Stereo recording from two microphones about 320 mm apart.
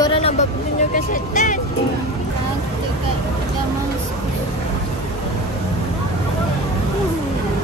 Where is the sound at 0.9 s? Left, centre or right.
Left.